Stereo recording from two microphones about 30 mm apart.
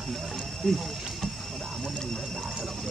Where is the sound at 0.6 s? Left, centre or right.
Centre.